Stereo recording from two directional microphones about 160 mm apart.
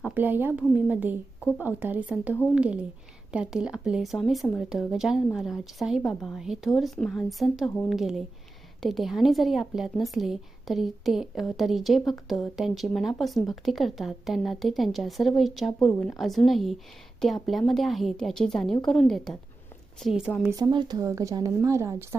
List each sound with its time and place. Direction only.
0.0 s a woman's voice: 10° right (ahead or behind)
20.5 s speech: 25° right (ahead or behind)